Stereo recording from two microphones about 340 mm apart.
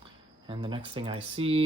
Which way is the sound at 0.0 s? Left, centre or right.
Centre.